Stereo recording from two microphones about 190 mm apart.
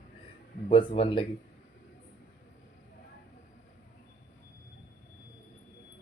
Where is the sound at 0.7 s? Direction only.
25° left (ahead or behind).